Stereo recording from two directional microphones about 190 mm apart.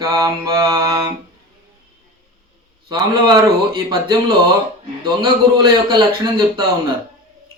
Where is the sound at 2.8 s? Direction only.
25° right (ahead or behind).